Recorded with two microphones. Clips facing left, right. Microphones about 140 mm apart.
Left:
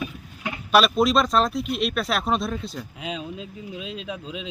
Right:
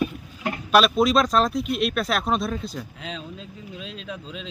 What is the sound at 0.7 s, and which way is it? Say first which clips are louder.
A man's voice: even; centre (ahead or behind).